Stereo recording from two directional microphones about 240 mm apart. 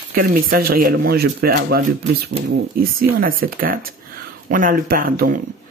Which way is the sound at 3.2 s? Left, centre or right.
Right.